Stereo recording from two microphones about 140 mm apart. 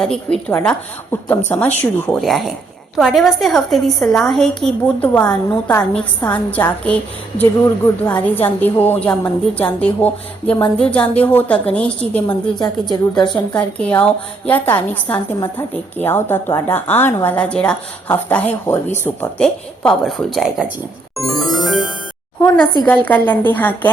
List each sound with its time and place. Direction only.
0.0 s a woman's voice: 5° left (ahead or behind)
2.2 s a woman's voice: centre (ahead or behind)
12.9 s a woman's voice: 30° left (ahead or behind)
13.5 s a woman's voice: 10° left (ahead or behind)
19.4 s a woman's voice: 5° left (ahead or behind)
22.8 s a woman's voice: 10° left (ahead or behind)